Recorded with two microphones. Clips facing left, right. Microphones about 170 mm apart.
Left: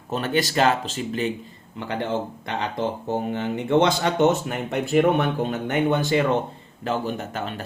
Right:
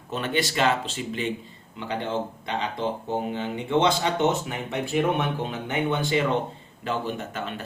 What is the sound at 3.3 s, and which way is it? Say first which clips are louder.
Speech: left 6 dB; 50° left (ahead or behind).